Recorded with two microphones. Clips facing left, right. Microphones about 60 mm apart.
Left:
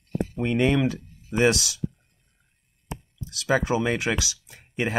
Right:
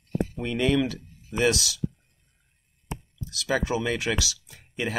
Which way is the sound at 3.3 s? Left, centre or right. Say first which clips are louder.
Left 3 dB; left.